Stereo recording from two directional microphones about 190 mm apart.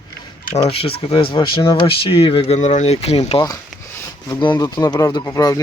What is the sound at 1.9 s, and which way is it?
Speech, 30° left (ahead or behind).